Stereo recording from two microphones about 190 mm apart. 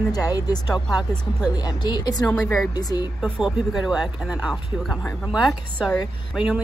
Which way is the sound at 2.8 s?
20° left (ahead or behind).